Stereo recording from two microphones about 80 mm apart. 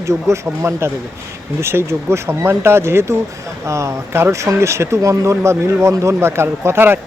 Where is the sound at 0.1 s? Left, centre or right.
Right.